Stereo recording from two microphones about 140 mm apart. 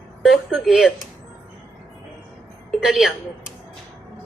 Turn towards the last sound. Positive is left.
turn(degrees=0)  # may be behind; listen again after turning